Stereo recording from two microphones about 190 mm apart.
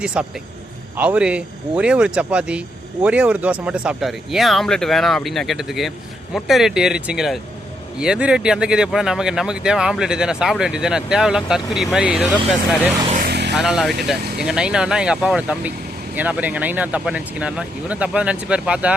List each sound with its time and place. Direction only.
0.0 s speech: 5° right (ahead or behind)
13.2 s vehicle: 60° right (ahead or behind)
13.6 s speech: centre (ahead or behind)